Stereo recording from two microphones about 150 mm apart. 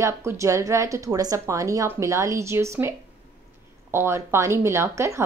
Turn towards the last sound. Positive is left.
turn(degrees=-20)  # may be behind; listen again after turning